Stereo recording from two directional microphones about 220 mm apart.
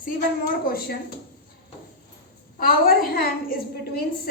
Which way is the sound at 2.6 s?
40° left (ahead or behind).